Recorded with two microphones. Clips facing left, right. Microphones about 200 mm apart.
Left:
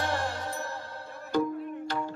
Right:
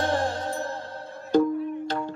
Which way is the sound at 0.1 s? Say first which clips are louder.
Right 6 dB; 20° right (ahead or behind).